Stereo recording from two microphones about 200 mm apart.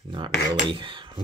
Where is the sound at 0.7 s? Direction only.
25° right (ahead or behind).